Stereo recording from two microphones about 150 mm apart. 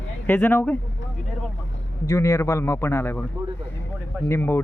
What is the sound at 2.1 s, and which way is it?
Speech, 20° left (ahead or behind).